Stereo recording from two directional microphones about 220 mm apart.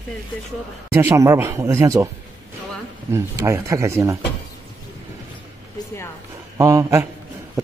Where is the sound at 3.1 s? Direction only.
15° right (ahead or behind).